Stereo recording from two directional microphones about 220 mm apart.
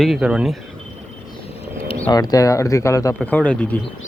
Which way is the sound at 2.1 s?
15° left (ahead or behind).